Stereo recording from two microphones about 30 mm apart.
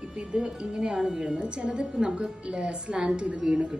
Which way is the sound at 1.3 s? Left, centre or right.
Right.